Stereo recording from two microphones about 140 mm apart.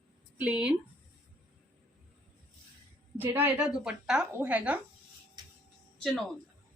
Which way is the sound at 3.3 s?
10° right (ahead or behind).